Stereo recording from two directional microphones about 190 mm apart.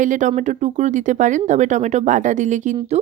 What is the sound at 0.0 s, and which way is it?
A woman's voice, 40° right (ahead or behind).